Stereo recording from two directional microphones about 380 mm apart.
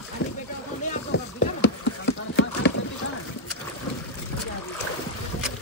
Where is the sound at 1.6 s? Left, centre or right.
Left.